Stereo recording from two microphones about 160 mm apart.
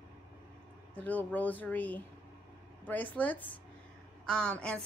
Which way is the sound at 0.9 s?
10° left (ahead or behind).